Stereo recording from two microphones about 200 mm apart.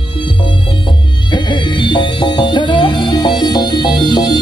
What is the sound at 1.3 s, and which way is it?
Music, 25° left (ahead or behind).